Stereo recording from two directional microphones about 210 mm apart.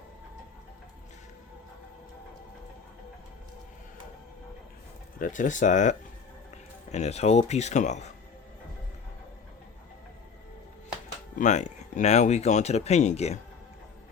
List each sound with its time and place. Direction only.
5.2 s speech: 35° left (ahead or behind)
11.3 s speech: 35° left (ahead or behind)